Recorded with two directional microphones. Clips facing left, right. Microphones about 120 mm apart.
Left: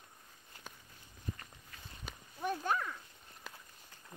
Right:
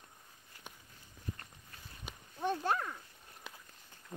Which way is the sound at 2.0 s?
25° right (ahead or behind).